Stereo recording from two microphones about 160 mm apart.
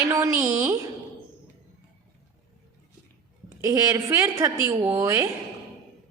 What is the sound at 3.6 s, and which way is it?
A woman's voice, 20° right (ahead or behind).